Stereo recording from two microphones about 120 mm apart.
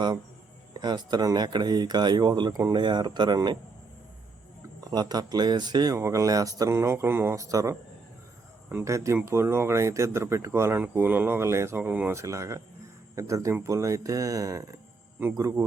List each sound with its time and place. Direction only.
0.7 s speech: 35° right (ahead or behind)
4.8 s speech: 35° right (ahead or behind)